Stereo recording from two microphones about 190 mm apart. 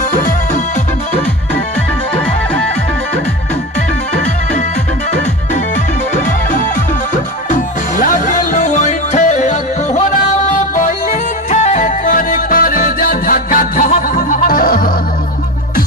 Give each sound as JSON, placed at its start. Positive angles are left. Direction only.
{"t": 8.0, "sound": "music", "side_deg": 45}